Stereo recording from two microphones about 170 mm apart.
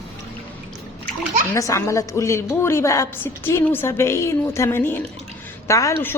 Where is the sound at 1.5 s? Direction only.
15° left (ahead or behind).